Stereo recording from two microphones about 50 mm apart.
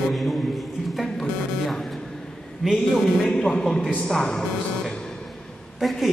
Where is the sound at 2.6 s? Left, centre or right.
Centre.